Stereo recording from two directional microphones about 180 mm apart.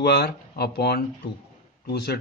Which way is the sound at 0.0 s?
60° left (ahead or behind).